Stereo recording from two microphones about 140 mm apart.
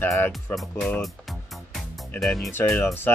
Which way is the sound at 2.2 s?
Centre (ahead or behind).